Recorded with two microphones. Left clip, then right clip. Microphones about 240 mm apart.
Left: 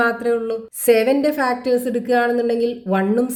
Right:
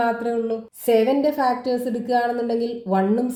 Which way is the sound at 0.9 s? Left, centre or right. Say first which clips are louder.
Left 3 dB; left.